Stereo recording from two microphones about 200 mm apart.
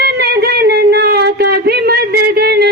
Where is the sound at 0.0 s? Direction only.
55° right (ahead or behind).